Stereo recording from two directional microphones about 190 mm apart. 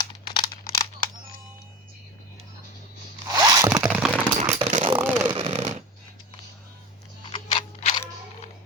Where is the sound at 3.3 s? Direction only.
20° right (ahead or behind); by 4.5 s 5° right (ahead or behind).